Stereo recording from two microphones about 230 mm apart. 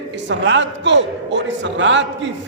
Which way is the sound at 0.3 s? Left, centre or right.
Right.